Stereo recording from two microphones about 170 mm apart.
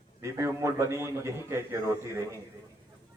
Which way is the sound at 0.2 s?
15° right (ahead or behind).